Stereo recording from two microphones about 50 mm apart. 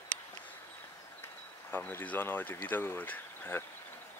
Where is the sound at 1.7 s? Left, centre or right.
Left.